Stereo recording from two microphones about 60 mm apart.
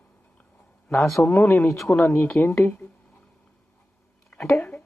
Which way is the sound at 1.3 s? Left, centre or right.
Left.